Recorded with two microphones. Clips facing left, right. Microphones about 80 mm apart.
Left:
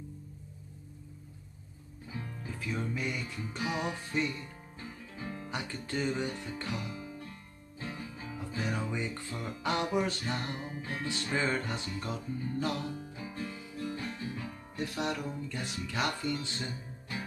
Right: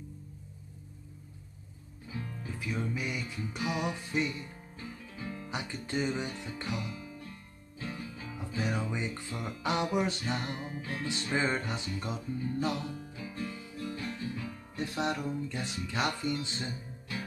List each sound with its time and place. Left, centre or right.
2.4 s music: centre
3.6 s music: left
4.1 s music: centre
5.1 s music: left
5.5 s music: centre
6.8 s guitar: left
7.8 s music: left
8.5 s music: centre
10.8 s music: left
11.2 s music: centre
13.1 s music: left
14.8 s music: right